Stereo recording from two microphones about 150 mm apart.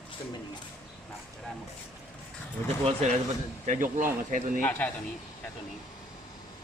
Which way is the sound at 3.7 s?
60° right (ahead or behind).